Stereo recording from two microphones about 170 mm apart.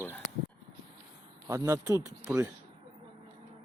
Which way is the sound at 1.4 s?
15° right (ahead or behind).